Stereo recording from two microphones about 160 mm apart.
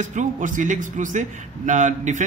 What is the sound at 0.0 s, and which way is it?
A man's voice, 50° right (ahead or behind).